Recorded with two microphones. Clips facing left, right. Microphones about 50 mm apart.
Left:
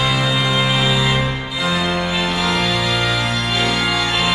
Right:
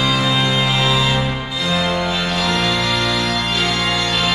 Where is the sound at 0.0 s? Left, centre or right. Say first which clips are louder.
Right 1 dB; centre.